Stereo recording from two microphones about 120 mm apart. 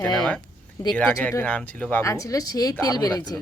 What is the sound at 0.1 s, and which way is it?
Speech, 5° left (ahead or behind).